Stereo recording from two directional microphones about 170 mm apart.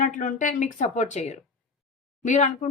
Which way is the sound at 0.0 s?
50° left (ahead or behind).